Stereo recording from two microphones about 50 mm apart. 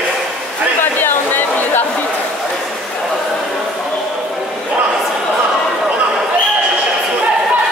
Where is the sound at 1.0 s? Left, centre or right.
Left.